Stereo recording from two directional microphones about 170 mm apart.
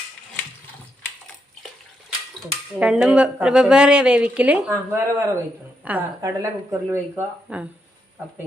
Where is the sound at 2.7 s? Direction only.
10° right (ahead or behind).